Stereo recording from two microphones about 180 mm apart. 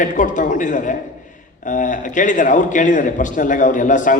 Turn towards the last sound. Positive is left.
turn(degrees=45)  # may be behind; listen again after turning